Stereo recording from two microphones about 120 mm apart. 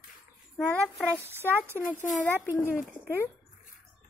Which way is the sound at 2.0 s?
90° left.